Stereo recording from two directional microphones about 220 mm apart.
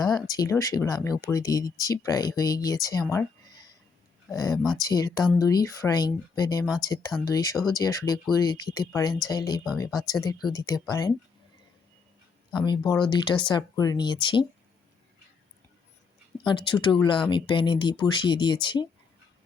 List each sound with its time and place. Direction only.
0.0 s speech: 15° left (ahead or behind)
4.3 s speech: 15° left (ahead or behind)
12.5 s speech: 20° left (ahead or behind)
16.5 s speech: 20° left (ahead or behind)